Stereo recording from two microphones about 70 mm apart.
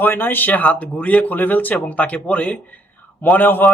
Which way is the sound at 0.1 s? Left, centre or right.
Left.